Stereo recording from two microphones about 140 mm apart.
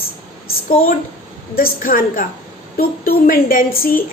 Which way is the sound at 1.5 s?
85° left.